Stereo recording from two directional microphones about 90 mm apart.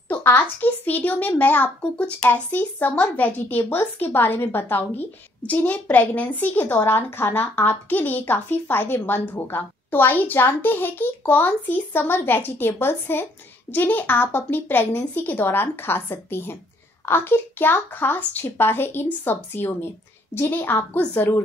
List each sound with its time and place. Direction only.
0.1 s a woman's voice: 20° left (ahead or behind)